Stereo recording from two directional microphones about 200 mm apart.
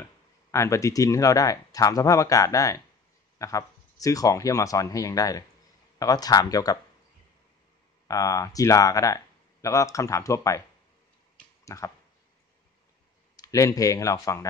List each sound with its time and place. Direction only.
0.5 s speech: 15° left (ahead or behind)
8.1 s speech: 15° left (ahead or behind)
11.3 s a sound: 15° left (ahead or behind)
13.4 s speech: 15° left (ahead or behind)